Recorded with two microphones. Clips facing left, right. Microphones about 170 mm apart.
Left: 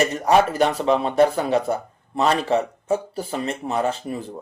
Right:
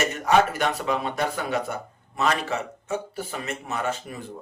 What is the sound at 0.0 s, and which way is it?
Speech, 35° left (ahead or behind).